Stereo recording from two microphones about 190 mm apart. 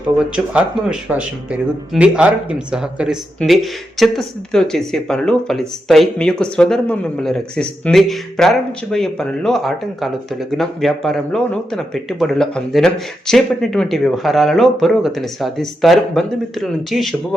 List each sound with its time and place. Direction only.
0.2 s speech: 5° right (ahead or behind)